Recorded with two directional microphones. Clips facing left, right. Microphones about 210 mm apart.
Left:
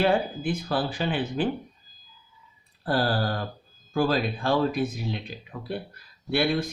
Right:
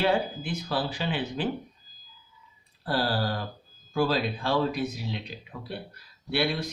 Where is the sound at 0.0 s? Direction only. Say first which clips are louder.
Left 2 dB; 50° left (ahead or behind).